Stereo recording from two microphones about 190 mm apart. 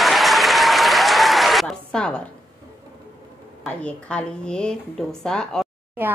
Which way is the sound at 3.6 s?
5° left (ahead or behind).